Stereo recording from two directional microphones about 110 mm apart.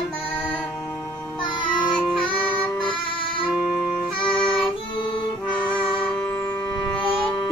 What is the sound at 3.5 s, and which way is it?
Music, 10° right (ahead or behind).